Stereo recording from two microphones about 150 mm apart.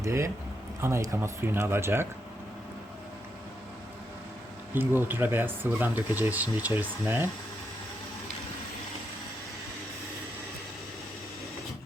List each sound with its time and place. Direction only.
0.0 s speech: 20° right (ahead or behind)
4.7 s speech: 15° right (ahead or behind)